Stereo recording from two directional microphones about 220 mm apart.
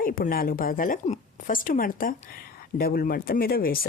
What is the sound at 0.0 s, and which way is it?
A woman's voice, 40° left (ahead or behind).